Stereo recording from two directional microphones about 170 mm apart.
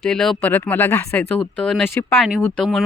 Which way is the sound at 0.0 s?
Centre (ahead or behind).